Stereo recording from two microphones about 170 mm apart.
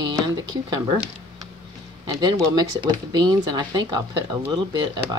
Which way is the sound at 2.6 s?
25° right (ahead or behind).